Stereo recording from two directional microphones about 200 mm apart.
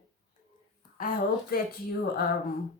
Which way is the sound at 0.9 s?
45° left (ahead or behind).